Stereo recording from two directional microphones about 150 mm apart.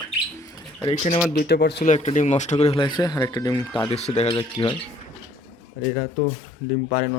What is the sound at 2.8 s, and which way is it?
Speech, 25° left (ahead or behind).